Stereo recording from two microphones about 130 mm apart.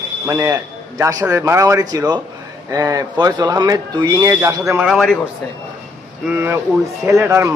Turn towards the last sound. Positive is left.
turn(degrees=-20)  # may be behind; listen again after turning